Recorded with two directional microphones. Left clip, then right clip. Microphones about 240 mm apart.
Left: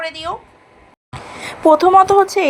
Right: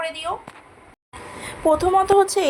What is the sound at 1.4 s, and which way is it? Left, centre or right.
A woman's voice, centre.